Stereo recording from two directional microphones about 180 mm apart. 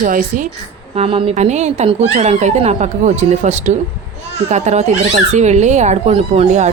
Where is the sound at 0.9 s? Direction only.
30° right (ahead or behind).